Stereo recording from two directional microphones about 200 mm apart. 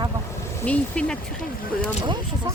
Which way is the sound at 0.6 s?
5° left (ahead or behind).